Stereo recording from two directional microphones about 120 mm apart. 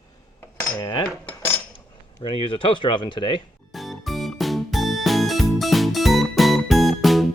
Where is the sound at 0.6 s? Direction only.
30° left (ahead or behind).